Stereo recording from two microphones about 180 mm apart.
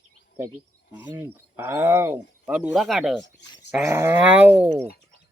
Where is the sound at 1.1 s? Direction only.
15° right (ahead or behind).